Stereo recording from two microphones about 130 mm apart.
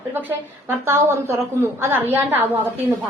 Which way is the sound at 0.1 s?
15° right (ahead or behind).